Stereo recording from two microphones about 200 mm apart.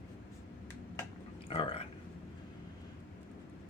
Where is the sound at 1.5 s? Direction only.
25° left (ahead or behind).